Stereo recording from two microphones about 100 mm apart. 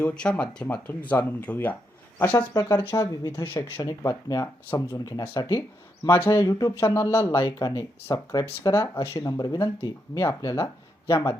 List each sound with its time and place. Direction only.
0.0 s speech: 10° left (ahead or behind)
2.5 s speech: 40° left (ahead or behind)
9.2 s speech: 40° left (ahead or behind)